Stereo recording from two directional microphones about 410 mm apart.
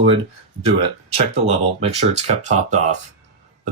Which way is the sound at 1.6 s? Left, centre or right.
Centre.